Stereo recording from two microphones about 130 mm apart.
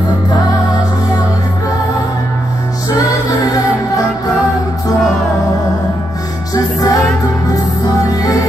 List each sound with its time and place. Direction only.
6.5 s music: 30° left (ahead or behind)